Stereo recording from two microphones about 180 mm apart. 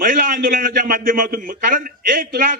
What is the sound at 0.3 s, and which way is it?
A man's voice, 50° right (ahead or behind).